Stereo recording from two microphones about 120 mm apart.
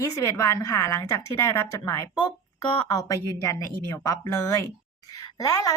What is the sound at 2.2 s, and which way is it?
A woman's voice, 40° left (ahead or behind).